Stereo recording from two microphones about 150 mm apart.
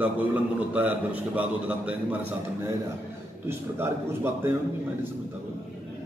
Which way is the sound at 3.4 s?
15° right (ahead or behind).